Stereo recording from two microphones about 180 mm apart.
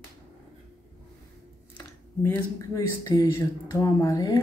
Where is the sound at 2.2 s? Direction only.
15° left (ahead or behind).